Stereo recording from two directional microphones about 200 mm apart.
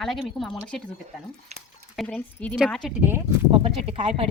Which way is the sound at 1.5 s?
35° right (ahead or behind).